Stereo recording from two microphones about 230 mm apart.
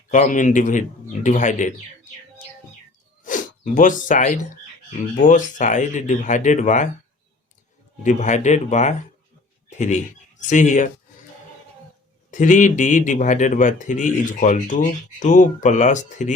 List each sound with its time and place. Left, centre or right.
0.1 s speech: left
3.2 s speech: left
8.0 s speech: left
12.3 s speech: left